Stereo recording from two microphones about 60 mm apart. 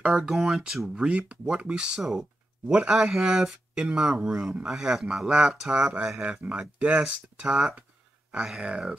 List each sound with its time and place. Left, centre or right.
0.1 s speech: centre
6.2 s speech: right